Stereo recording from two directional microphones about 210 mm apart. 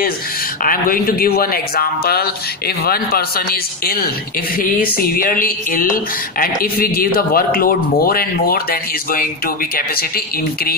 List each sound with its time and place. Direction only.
0.7 s speech: 40° left (ahead or behind)